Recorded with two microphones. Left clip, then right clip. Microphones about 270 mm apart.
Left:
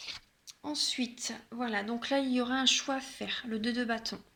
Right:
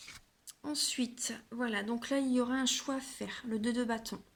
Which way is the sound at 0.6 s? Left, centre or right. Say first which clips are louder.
Left 2 dB; right.